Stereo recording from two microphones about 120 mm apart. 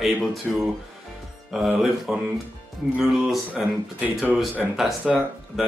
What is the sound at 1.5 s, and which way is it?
Speech, 5° right (ahead or behind).